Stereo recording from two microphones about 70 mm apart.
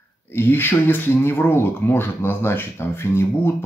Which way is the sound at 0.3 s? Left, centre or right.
Left.